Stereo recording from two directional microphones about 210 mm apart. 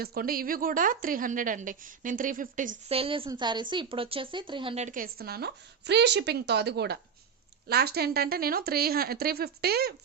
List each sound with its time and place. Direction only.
0.0 s a woman's voice: 45° right (ahead or behind)
2.9 s speech: 25° right (ahead or behind); by 9.9 s 50° right (ahead or behind)